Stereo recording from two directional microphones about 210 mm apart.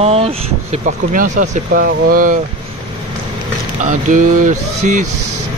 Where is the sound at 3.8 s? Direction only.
40° right (ahead or behind).